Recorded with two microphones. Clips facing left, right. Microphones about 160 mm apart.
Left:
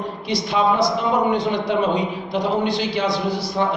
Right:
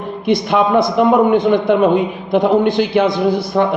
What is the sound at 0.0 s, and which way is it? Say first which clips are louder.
A man's voice: right 8 dB; 55° right (ahead or behind).